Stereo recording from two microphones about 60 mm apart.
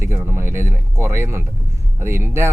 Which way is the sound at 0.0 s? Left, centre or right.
Right.